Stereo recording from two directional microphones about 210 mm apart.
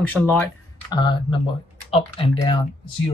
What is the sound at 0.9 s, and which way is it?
Speech, 20° left (ahead or behind).